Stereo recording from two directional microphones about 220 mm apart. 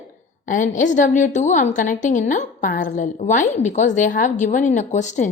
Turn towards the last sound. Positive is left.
turn(degrees=30)  # may be behind; listen again after turning